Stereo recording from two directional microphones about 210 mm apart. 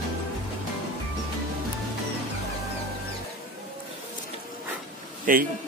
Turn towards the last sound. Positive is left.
turn(degrees=-40)  # may be behind; listen again after turning